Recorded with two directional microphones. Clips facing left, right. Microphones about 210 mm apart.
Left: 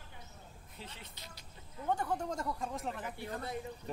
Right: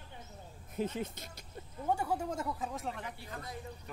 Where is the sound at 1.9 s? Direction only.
10° right (ahead or behind).